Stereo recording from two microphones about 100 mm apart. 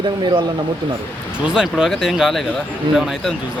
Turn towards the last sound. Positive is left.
turn(degrees=-5)  # may be behind; listen again after turning